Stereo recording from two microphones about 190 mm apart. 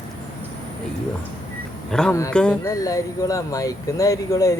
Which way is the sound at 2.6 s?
20° left (ahead or behind).